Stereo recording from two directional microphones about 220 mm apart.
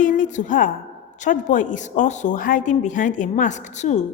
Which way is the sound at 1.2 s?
35° left (ahead or behind).